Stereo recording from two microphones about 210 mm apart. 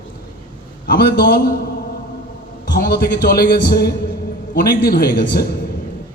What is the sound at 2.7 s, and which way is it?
A man's voice, 50° left (ahead or behind).